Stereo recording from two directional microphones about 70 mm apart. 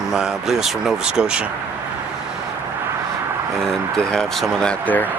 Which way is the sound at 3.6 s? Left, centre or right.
Centre.